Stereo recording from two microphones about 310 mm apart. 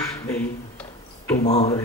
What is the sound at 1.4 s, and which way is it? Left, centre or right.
Speech, centre.